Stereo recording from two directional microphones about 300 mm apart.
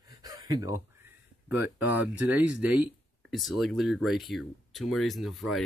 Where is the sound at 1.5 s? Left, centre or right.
Centre.